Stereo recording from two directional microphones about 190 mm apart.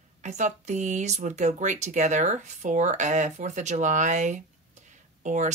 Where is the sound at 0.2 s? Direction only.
40° right (ahead or behind).